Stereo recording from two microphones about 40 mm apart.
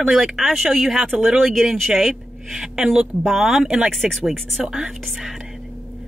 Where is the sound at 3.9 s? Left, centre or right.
Centre.